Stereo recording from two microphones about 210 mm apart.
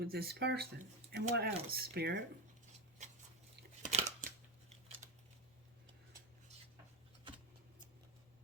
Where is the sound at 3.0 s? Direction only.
35° right (ahead or behind).